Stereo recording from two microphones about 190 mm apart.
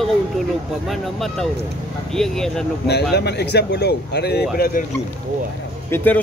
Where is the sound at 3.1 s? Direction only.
60° left (ahead or behind).